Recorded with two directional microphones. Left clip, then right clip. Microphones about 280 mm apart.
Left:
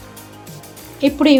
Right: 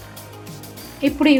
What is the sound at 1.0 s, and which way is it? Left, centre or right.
Speech, centre.